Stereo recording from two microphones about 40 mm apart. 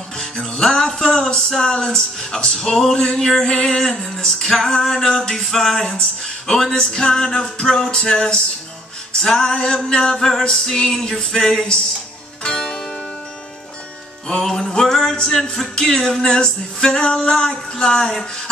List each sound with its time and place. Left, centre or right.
0.2 s music: centre
14.2 s music: centre
14.9 s music: centre
15.1 s music: left